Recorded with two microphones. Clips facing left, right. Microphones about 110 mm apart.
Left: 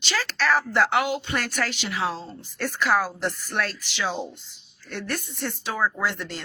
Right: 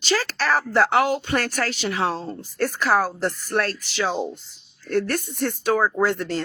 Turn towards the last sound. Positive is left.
turn(degrees=-45)  # may be behind; listen again after turning